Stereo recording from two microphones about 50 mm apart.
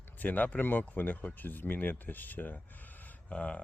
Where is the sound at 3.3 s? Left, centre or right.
Left.